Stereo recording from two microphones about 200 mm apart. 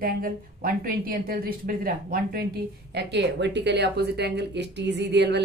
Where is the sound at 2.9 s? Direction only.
60° right (ahead or behind).